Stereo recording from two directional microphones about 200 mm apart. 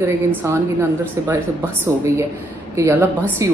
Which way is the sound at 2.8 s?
15° right (ahead or behind).